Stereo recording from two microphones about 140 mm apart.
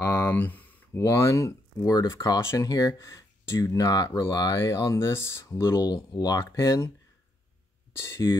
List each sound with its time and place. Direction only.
0.0 s a sound: 15° left (ahead or behind)
1.0 s speech: 20° left (ahead or behind)
8.0 s speech: 20° left (ahead or behind)